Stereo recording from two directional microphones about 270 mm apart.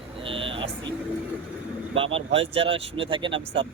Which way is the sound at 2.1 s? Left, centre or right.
Right.